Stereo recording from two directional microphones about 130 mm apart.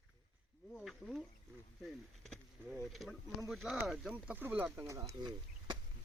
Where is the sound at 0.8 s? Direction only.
5° left (ahead or behind).